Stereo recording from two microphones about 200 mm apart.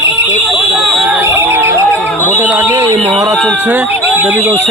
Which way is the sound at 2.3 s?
10° right (ahead or behind).